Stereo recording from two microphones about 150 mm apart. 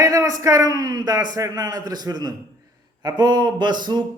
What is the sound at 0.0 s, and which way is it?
A man's voice, 20° right (ahead or behind).